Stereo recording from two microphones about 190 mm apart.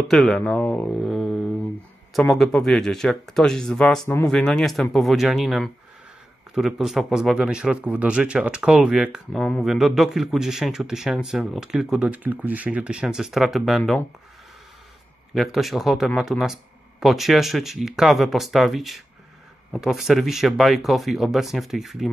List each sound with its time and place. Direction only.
0.1 s speech: centre (ahead or behind)
4.0 s speech: 15° left (ahead or behind)
4.3 s speech: 5° left (ahead or behind)
15.3 s speech: centre (ahead or behind)